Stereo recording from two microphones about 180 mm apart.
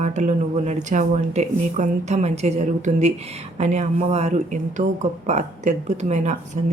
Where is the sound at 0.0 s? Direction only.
40° right (ahead or behind).